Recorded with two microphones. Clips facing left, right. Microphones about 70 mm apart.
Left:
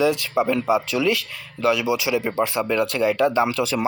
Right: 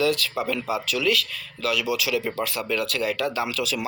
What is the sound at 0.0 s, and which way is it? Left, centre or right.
Speech, left.